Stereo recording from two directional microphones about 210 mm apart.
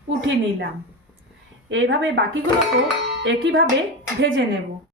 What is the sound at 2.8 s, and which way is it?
Music, 55° right (ahead or behind).